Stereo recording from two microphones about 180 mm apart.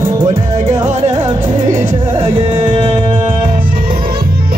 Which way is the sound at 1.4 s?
45° right (ahead or behind).